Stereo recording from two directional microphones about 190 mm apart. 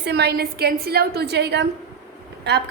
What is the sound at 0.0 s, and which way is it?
A woman's voice, 60° right (ahead or behind).